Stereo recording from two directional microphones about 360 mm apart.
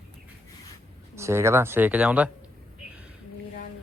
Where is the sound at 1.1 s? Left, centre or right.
Centre.